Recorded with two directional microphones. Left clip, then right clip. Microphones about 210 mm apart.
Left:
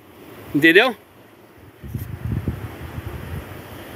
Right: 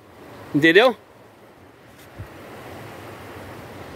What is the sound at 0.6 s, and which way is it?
Speech, 15° right (ahead or behind).